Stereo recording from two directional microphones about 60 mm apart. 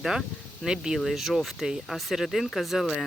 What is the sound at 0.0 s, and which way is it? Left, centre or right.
Speech, centre.